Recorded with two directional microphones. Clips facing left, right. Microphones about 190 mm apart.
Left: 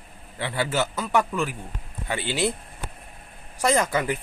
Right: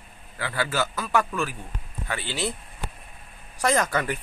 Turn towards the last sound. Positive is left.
turn(degrees=10)  # may be behind; listen again after turning